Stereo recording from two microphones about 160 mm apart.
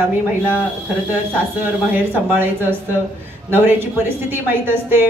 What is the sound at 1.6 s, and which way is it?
Speech, 15° right (ahead or behind).